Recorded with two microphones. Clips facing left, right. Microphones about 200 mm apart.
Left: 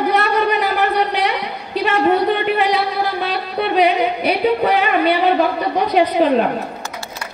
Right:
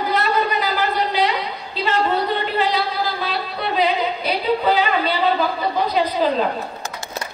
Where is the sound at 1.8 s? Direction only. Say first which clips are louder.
Left 5 dB; 60° left (ahead or behind).